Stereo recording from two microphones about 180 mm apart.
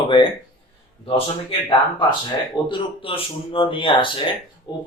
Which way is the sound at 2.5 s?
30° left (ahead or behind).